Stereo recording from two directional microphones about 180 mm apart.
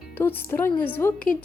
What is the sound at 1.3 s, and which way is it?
Speech, 45° left (ahead or behind).